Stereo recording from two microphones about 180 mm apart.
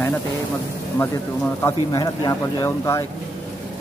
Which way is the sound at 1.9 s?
20° left (ahead or behind).